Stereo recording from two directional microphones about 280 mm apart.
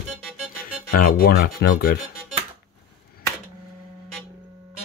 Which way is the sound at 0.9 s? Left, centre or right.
Left.